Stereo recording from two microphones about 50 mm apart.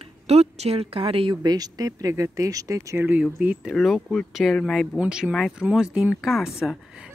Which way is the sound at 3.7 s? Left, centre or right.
Centre.